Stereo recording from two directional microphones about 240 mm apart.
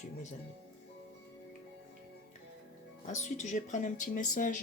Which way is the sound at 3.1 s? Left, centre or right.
Left.